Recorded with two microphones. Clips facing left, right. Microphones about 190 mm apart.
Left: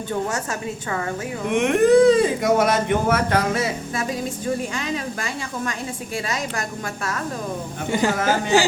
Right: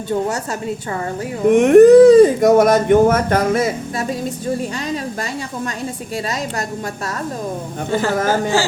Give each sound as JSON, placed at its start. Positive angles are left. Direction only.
{"t": 1.5, "sound": "speech", "side_deg": -45}
{"t": 7.9, "sound": "speech", "side_deg": 15}